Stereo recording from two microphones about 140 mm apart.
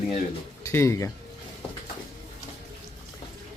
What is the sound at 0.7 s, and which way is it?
Speech, 20° left (ahead or behind).